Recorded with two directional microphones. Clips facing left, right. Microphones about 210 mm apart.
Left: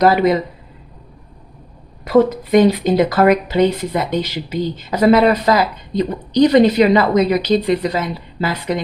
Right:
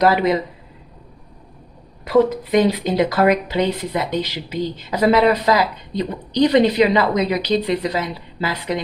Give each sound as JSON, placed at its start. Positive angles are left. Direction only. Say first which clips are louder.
{"t": 0.0, "sound": "speech", "louder": "left 3 dB", "side_deg": 45}
{"t": 2.0, "sound": "speech", "louder": "left 2 dB", "side_deg": 50}